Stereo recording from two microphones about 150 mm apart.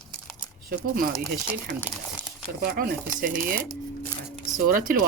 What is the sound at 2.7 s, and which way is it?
Speech, 75° right (ahead or behind).